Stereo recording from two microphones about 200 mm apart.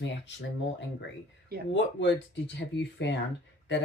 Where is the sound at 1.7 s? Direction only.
65° left (ahead or behind).